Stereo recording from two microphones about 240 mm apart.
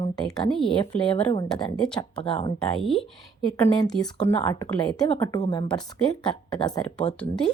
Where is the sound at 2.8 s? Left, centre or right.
Centre.